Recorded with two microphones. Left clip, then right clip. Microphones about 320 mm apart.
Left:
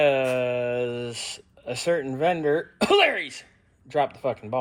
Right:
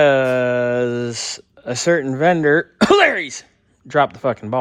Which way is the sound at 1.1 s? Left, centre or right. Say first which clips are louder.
Right 7 dB; right.